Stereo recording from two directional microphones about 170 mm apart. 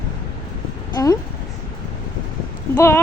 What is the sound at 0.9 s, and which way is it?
Speech, 20° left (ahead or behind).